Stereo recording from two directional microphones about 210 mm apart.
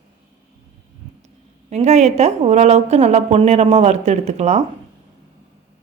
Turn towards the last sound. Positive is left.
turn(degrees=-30)  # may be behind; listen again after turning